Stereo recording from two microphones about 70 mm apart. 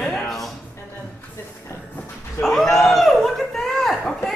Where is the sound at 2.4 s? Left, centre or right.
Centre.